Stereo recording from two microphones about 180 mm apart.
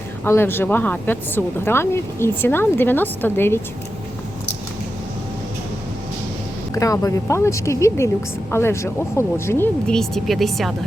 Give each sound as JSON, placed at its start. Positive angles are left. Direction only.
{"t": 0.3, "sound": "speech", "side_deg": 15}
{"t": 6.7, "sound": "speech", "side_deg": 20}